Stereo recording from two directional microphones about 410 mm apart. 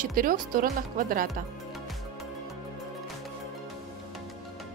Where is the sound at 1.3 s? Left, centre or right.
Centre.